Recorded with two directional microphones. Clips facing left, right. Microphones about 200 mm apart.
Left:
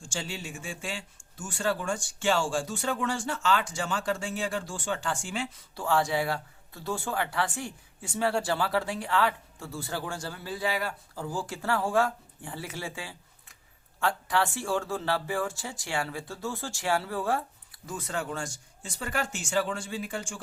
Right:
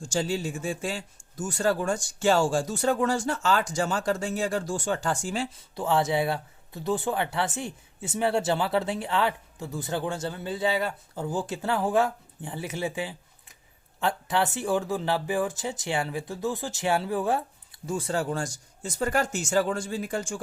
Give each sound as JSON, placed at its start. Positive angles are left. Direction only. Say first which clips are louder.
{"t": 0.0, "sound": "speech", "louder": "right 9 dB", "side_deg": -40}
{"t": 5.7, "sound": "speech", "louder": "right 2 dB", "side_deg": -20}